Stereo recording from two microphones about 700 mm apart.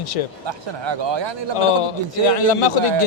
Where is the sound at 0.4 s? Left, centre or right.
Right.